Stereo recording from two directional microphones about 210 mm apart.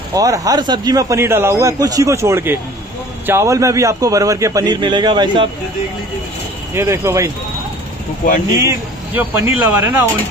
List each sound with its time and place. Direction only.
0.1 s speech: 15° right (ahead or behind)
6.7 s speech: 10° right (ahead or behind)
8.5 s speech: 10° right (ahead or behind)